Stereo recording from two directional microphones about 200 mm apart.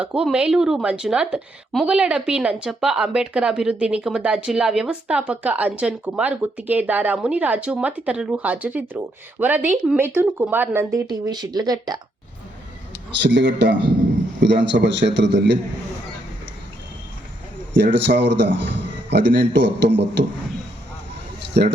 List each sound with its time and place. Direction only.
0.0 s a woman's voice: 5° right (ahead or behind); by 11.9 s 20° right (ahead or behind)
13.2 s a man's voice: 60° right (ahead or behind)
17.7 s a man's voice: 60° right (ahead or behind)
21.5 s a man's voice: 55° right (ahead or behind)